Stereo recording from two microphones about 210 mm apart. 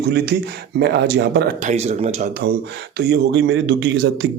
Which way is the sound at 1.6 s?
30° right (ahead or behind).